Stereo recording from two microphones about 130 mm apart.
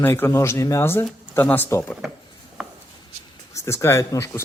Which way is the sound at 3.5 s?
20° left (ahead or behind).